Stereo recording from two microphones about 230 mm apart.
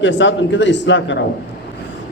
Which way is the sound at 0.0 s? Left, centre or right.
Left.